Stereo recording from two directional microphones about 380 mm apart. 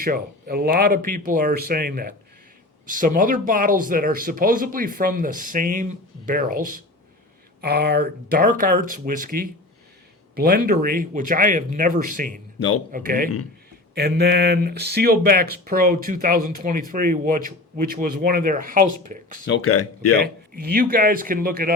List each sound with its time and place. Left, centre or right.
0.0 s speech: right
12.5 s a man's voice: left
12.9 s speech: right
19.5 s speech: left
20.1 s speech: right